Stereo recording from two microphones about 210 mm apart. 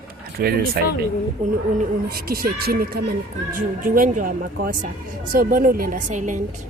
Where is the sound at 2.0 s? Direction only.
45° right (ahead or behind).